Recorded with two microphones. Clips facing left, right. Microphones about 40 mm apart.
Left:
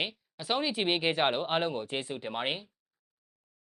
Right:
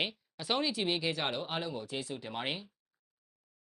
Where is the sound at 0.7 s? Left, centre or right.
Left.